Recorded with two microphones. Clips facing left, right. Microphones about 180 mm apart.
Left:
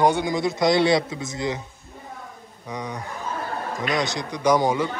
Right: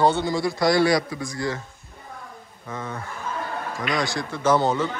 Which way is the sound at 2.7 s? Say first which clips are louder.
Left 1 dB; 15° left (ahead or behind).